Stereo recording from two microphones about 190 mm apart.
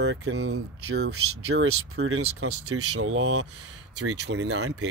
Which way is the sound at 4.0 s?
70° right (ahead or behind).